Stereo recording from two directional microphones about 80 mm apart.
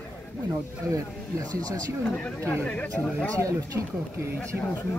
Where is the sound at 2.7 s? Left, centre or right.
Centre.